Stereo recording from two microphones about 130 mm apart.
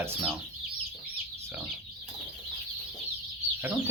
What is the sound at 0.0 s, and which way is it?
Speech, 20° right (ahead or behind).